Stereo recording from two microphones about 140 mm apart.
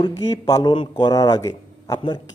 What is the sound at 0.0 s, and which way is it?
A man's voice, 30° left (ahead or behind).